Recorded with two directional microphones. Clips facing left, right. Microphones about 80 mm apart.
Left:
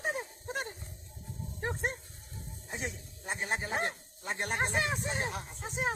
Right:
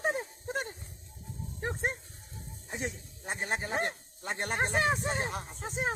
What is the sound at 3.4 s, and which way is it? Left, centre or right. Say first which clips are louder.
Speech: right 1 dB; right.